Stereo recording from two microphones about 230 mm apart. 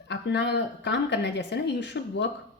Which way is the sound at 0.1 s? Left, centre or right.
Left.